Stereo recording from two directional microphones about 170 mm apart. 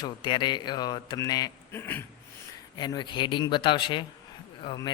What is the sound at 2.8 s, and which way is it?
A man's voice, 25° left (ahead or behind).